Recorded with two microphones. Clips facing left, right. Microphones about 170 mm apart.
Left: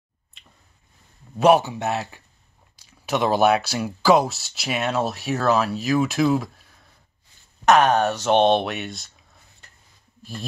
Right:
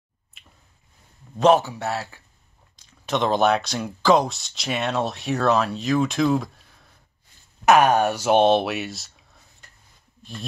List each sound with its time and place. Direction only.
0.4 s finger snapping: 5° right (ahead or behind)
1.3 s speech: 10° left (ahead or behind)
7.6 s speech: 10° right (ahead or behind)